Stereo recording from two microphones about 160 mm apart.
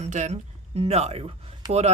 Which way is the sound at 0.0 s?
45° right (ahead or behind).